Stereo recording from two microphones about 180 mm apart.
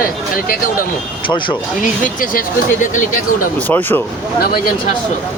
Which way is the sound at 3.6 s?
10° left (ahead or behind).